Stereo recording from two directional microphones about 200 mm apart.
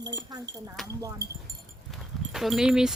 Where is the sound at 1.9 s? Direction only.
Centre (ahead or behind).